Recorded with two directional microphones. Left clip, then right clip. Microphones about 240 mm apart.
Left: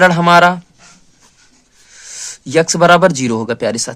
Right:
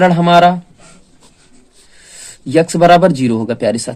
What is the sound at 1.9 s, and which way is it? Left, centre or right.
Speech, left.